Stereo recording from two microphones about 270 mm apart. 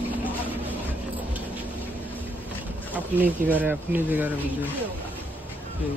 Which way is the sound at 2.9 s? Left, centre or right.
Centre.